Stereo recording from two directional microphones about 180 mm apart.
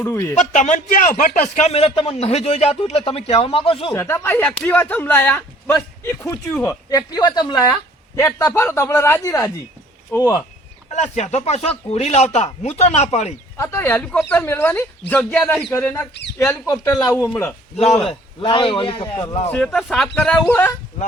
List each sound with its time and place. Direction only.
0.0 s speech: 15° left (ahead or behind)
0.3 s speech: 40° left (ahead or behind)
3.9 s a man's voice: 15° left (ahead or behind)
10.9 s speech: 40° left (ahead or behind)
13.6 s speech: 15° left (ahead or behind)
18.3 s a man's voice: 25° left (ahead or behind)
19.5 s speech: 5° left (ahead or behind)